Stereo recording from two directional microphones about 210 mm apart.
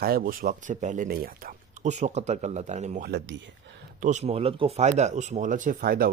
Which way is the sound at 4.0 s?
35° right (ahead or behind).